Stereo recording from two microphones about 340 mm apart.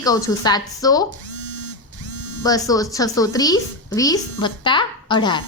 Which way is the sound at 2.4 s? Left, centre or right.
Centre.